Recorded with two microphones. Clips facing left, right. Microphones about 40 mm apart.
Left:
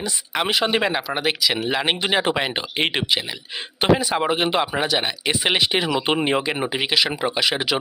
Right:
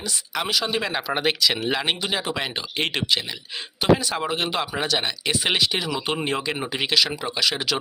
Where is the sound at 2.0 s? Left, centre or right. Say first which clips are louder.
Left 6 dB; left.